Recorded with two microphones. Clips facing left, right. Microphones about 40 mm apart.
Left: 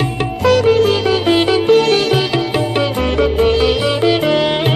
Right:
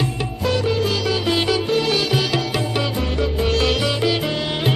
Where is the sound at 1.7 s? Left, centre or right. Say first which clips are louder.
Left 8 dB; left.